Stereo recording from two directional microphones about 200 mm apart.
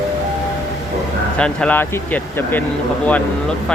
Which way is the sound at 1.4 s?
5° left (ahead or behind).